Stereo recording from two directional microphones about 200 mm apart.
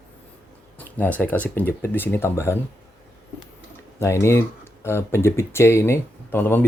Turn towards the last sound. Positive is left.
turn(degrees=10)  # may be behind; listen again after turning